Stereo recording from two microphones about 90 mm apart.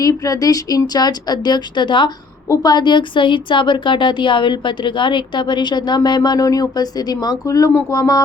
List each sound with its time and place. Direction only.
0.0 s speech: 40° left (ahead or behind)